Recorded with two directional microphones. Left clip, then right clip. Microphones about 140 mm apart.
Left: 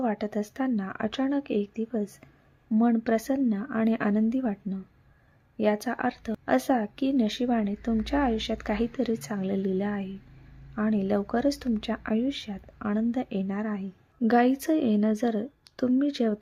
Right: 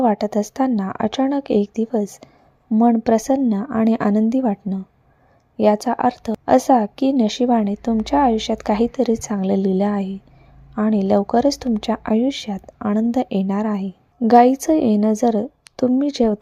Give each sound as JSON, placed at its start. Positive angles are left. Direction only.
{"t": 0.0, "sound": "speech", "side_deg": -40}